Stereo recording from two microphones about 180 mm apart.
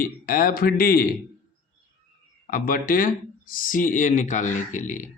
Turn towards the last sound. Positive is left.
turn(degrees=45)  # may be behind; listen again after turning